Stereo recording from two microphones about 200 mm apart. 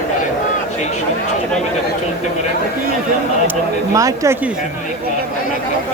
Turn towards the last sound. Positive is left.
turn(degrees=-15)  # may be behind; listen again after turning